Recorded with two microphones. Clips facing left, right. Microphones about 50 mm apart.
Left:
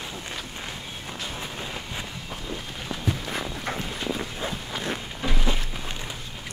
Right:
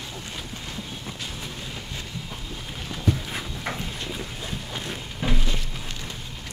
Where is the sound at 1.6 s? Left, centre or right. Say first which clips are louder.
Left 2 dB; left.